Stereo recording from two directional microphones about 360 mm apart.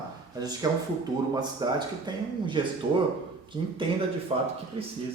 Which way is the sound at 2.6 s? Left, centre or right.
Centre.